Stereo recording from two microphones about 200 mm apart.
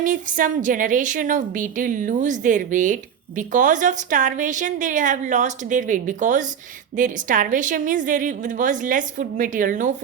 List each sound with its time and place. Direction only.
0.0 s a woman's voice: 40° right (ahead or behind)